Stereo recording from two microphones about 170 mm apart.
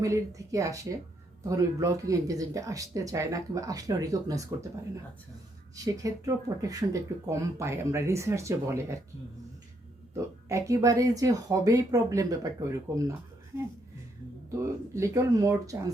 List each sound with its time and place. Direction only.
0.0 s speech: 20° right (ahead or behind)
5.7 s speech: 20° right (ahead or behind)
10.2 s speech: 20° right (ahead or behind)
14.6 s speech: 15° right (ahead or behind)